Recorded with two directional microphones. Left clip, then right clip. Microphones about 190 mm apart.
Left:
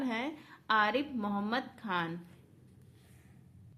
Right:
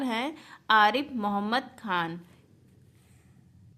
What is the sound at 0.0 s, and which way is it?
A woman's voice, 25° right (ahead or behind).